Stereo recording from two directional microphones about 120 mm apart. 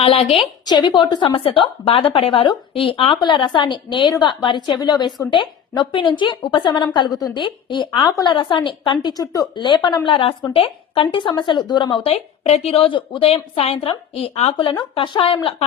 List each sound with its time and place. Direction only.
0.0 s speech: 55° left (ahead or behind)
0.6 s speech: 35° left (ahead or behind)
9.6 s speech: 40° left (ahead or behind)
12.1 s a woman's voice: 60° left (ahead or behind)
14.8 s speech: 40° left (ahead or behind)